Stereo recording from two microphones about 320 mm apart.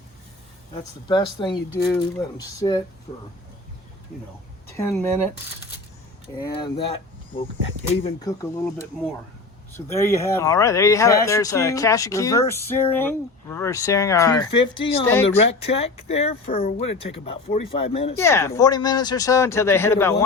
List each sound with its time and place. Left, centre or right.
1.0 s speech: centre
4.8 s speech: centre
6.5 s speech: centre
7.9 s speech: centre
15.4 s speech: centre